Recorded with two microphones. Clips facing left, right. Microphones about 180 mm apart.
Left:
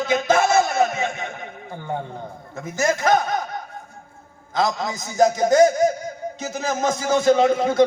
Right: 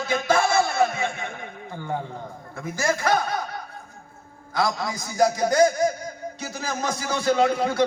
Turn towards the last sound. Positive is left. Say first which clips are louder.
# left 4 dB
turn(degrees=25)  # may be behind; listen again after turning